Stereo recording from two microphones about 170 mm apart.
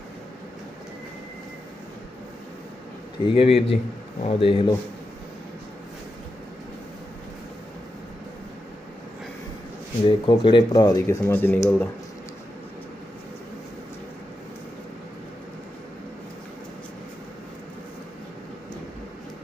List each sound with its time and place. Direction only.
3.2 s speech: 35° left (ahead or behind)
10.1 s speech: 30° left (ahead or behind)
11.2 s speech: 10° left (ahead or behind)